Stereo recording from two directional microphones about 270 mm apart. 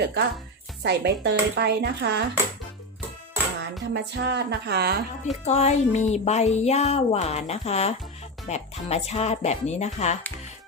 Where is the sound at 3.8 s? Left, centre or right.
Right.